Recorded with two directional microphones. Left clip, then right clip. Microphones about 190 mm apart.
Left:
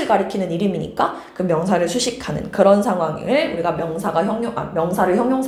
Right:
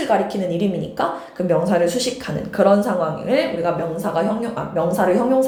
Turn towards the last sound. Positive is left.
turn(degrees=15)  # may be behind; listen again after turning